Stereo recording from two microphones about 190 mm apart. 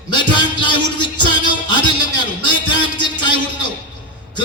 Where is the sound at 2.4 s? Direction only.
25° left (ahead or behind).